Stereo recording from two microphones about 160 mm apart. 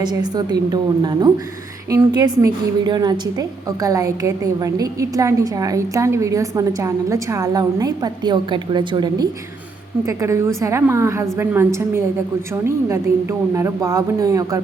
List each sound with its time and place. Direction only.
0.0 s a woman's voice: 25° right (ahead or behind)
13.5 s a woman's voice: 20° right (ahead or behind)